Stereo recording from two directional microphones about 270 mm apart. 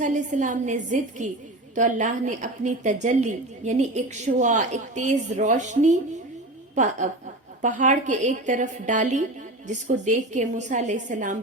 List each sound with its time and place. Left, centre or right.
0.0 s a woman's voice: right
7.6 s a woman's voice: right